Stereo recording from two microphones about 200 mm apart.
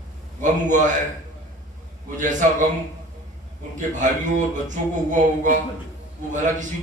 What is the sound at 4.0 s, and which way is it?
Speech, 40° right (ahead or behind).